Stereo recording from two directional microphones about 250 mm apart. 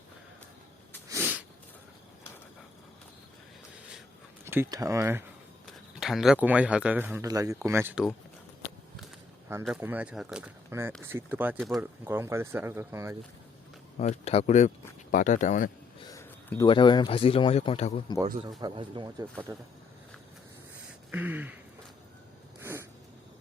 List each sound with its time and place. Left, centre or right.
1.1 s a sound: centre
4.4 s speech: centre
9.5 s speech: centre
14.0 s speech: left
16.0 s speech: centre
18.6 s speech: centre
21.1 s speech: centre